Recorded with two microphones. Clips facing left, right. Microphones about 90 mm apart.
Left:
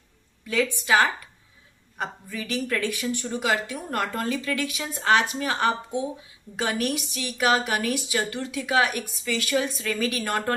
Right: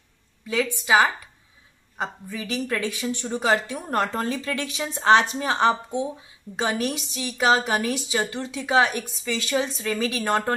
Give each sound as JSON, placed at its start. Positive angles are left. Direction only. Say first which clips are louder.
{"t": 0.8, "sound": "a woman's voice", "louder": "right 3 dB", "side_deg": -15}
{"t": 3.3, "sound": "a woman's voice", "louder": "right 5 dB", "side_deg": -35}